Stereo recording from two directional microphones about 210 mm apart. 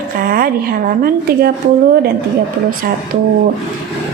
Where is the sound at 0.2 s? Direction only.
45° right (ahead or behind).